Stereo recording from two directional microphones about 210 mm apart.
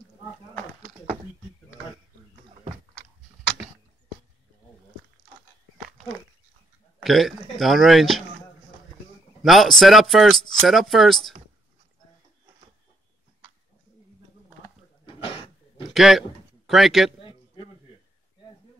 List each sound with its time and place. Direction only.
7.0 s speech: centre (ahead or behind)
9.4 s speech: centre (ahead or behind)
15.0 s a sound: 25° left (ahead or behind)
15.9 s a man's voice: centre (ahead or behind)